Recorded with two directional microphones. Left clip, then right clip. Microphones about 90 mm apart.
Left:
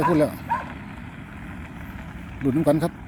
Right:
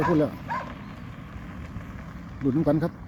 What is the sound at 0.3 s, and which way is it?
Vehicle, 50° right (ahead or behind).